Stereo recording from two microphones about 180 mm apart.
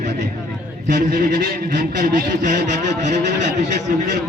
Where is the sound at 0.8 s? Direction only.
50° right (ahead or behind).